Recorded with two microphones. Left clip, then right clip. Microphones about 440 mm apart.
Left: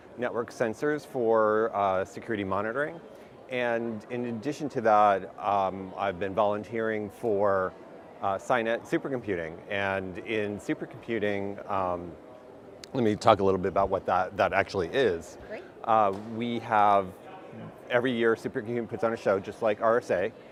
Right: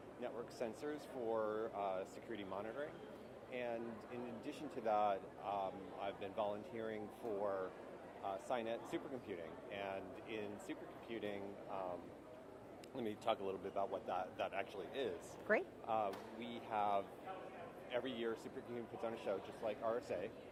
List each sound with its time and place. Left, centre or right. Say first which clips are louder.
0.2 s speech: left 17 dB; left
13.0 s speech: left 19 dB; left
15.9 s speech: left 18 dB; left